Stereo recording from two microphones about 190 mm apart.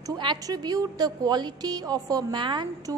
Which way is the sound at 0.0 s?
20° right (ahead or behind).